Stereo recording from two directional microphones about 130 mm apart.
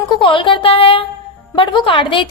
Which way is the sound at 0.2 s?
40° left (ahead or behind).